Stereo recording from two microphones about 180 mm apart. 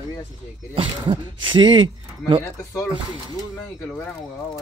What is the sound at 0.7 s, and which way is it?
Speech, 30° right (ahead or behind).